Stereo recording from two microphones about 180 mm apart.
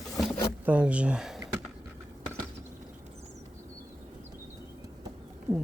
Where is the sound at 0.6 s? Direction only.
10° right (ahead or behind).